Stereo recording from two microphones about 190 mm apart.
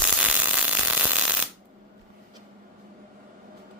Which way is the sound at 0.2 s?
5° right (ahead or behind).